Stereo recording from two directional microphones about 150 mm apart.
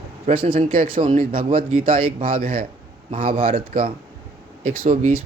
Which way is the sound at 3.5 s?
70° right (ahead or behind).